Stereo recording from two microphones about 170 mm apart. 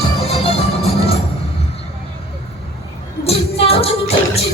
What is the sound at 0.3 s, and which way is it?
Music, 35° left (ahead or behind).